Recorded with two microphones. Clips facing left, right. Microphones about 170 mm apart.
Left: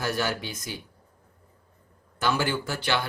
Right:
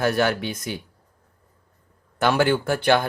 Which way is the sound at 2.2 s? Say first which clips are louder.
Right 7 dB; 60° right (ahead or behind).